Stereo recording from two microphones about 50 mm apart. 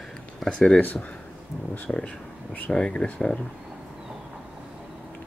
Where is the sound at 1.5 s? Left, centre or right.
Centre.